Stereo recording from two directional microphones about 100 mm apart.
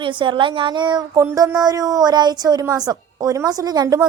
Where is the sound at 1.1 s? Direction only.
30° right (ahead or behind).